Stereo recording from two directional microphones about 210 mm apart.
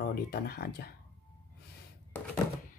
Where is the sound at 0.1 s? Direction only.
50° left (ahead or behind).